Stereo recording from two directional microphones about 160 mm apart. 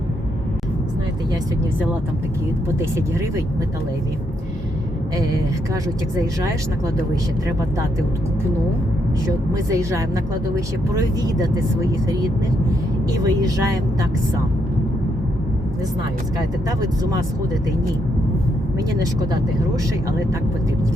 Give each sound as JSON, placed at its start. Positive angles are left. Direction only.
{"t": 2.6, "sound": "speech", "side_deg": -20}
{"t": 9.6, "sound": "speech", "side_deg": -20}
{"t": 13.2, "sound": "speech", "side_deg": -20}
{"t": 16.4, "sound": "speech", "side_deg": -25}
{"t": 19.3, "sound": "speech", "side_deg": -20}